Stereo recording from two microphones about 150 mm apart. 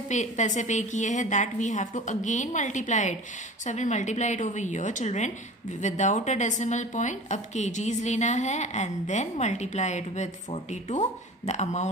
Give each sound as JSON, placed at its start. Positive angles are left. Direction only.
{"t": 0.1, "sound": "a woman's voice", "side_deg": 55}